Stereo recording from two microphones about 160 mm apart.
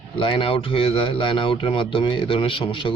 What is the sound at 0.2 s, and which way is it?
A man's voice, 35° left (ahead or behind).